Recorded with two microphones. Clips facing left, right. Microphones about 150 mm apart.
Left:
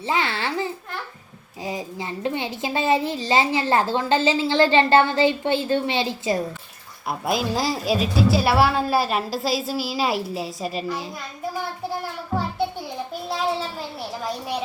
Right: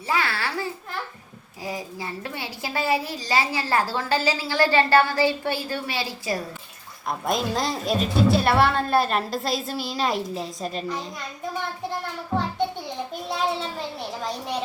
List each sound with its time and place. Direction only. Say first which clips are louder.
0.1 s babbling: left 2 dB; 20° left (ahead or behind)
1.6 s a child's voice: left 2 dB; 20° left (ahead or behind)
7.1 s a woman's voice: left 1 dB; 5° left (ahead or behind)
13.6 s a sound: even; 5° left (ahead or behind)